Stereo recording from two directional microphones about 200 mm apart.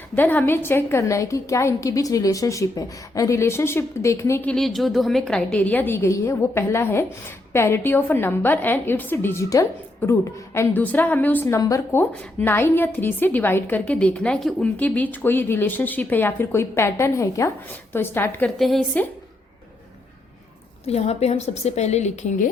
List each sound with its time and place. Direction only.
0.2 s a woman's voice: 10° left (ahead or behind)
20.8 s a woman's voice: 30° left (ahead or behind)